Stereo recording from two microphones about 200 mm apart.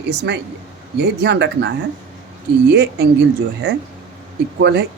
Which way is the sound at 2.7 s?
60° right (ahead or behind).